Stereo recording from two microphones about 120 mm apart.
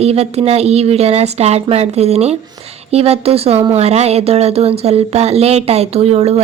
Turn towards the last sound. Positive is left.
turn(degrees=-60)  # may be behind; listen again after turning